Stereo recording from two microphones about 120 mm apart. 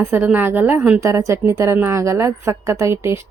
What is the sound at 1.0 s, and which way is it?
A woman's voice, 25° right (ahead or behind).